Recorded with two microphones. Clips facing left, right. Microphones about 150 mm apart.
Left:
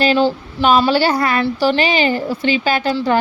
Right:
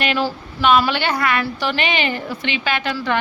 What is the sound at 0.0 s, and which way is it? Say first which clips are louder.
Speech: left 7 dB; 30° left (ahead or behind).